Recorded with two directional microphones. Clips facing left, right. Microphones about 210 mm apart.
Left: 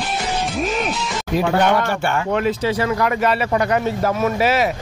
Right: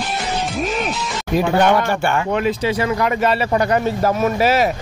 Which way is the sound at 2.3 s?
15° right (ahead or behind).